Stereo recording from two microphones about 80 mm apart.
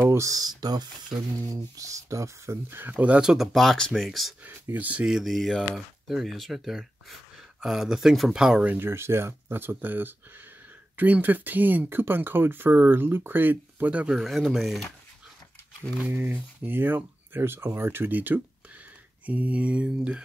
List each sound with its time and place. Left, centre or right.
0.0 s a sound: right
0.3 s speech: right
1.5 s speech: right
2.9 s speech: centre
4.5 s speech: right
5.0 s speech: centre
8.6 s speech: right
14.1 s speech: centre
16.0 s speech: right
19.2 s mantra: centre